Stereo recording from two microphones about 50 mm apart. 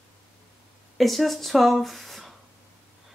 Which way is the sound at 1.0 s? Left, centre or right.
Centre.